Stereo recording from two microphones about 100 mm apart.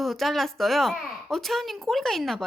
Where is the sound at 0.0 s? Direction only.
Centre (ahead or behind).